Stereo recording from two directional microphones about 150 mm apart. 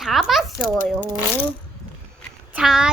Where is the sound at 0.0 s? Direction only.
Centre (ahead or behind).